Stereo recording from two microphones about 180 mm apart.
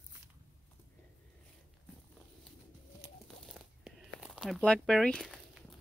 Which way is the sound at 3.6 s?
5° right (ahead or behind).